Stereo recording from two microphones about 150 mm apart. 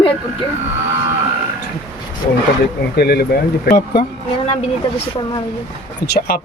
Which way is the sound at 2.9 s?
90° left.